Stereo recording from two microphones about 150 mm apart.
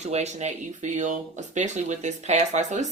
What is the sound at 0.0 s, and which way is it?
Speech, 50° right (ahead or behind).